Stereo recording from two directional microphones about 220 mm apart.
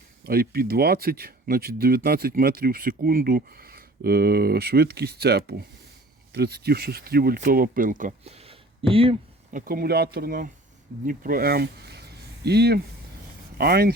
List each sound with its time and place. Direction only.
0.3 s speech: 45° right (ahead or behind); by 9.1 s 25° right (ahead or behind)
9.5 s speech: 40° right (ahead or behind)